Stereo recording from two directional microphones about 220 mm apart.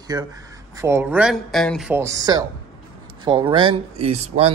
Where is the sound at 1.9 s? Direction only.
15° right (ahead or behind).